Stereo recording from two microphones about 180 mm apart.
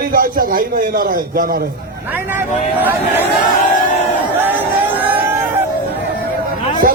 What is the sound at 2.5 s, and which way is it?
Speech, 40° left (ahead or behind).